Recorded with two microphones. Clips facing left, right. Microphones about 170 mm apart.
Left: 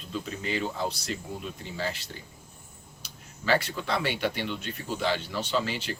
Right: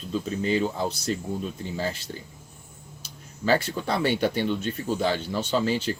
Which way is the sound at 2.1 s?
30° right (ahead or behind).